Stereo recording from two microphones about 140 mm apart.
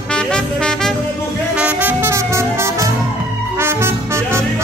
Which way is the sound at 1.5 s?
10° right (ahead or behind).